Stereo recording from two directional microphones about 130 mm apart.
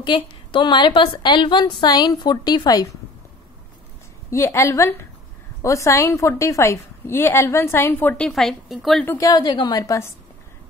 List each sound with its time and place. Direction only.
0.0 s a woman's voice: 35° left (ahead or behind)
4.3 s a woman's voice: 20° left (ahead or behind)
8.3 s speech: centre (ahead or behind)
9.0 s a woman's voice: 15° left (ahead or behind)
9.3 s a woman's voice: 30° left (ahead or behind)